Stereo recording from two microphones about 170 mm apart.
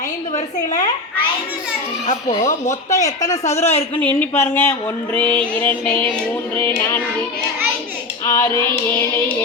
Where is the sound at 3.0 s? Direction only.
20° left (ahead or behind).